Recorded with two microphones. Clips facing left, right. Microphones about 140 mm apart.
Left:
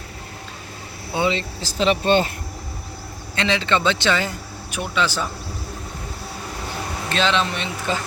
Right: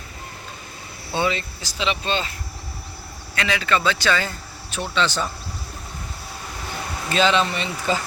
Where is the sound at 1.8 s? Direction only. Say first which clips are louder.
Left 7 dB; 50° left (ahead or behind).